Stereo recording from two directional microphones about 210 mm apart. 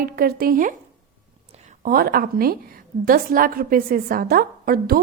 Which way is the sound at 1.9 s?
45° right (ahead or behind).